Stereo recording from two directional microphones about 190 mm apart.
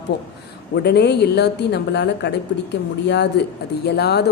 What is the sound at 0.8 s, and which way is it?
A woman's voice, 60° left (ahead or behind).